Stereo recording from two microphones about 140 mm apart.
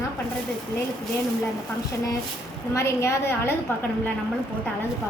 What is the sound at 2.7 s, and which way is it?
Speech, 20° left (ahead or behind).